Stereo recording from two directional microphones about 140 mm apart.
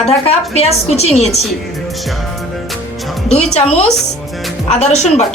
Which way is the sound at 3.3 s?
45° left (ahead or behind).